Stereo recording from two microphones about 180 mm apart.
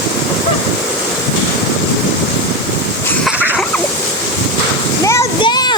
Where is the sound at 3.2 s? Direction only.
10° right (ahead or behind).